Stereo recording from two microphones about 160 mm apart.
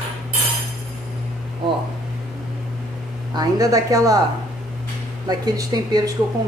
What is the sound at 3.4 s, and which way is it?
Speech, 20° right (ahead or behind).